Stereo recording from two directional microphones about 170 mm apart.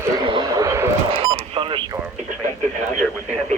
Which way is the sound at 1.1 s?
35° right (ahead or behind).